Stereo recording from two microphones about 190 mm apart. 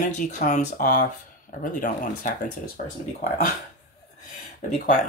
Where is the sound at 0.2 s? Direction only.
45° left (ahead or behind).